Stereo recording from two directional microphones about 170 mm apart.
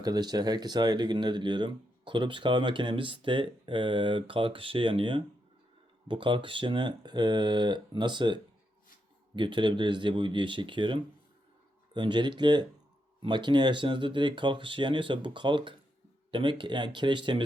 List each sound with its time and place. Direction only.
0.0 s speech: 25° right (ahead or behind)